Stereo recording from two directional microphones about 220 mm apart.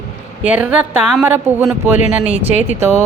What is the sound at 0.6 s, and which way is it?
Speech, 5° right (ahead or behind).